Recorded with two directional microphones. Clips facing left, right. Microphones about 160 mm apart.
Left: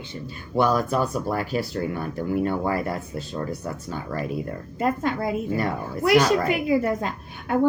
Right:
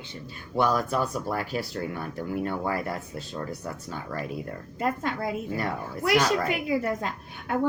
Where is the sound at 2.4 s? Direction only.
35° left (ahead or behind).